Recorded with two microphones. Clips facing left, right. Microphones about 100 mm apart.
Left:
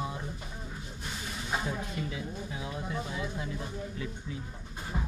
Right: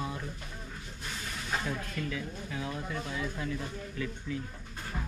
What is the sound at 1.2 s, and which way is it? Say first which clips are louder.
Speech: left 1 dB; 15° left (ahead or behind).